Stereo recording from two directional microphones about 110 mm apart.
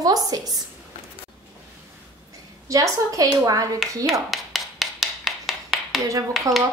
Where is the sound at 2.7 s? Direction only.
30° right (ahead or behind).